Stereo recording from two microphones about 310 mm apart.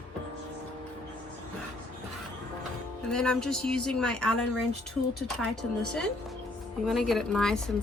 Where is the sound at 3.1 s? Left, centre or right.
Centre.